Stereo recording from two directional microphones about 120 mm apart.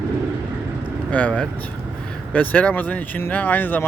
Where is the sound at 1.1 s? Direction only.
10° left (ahead or behind).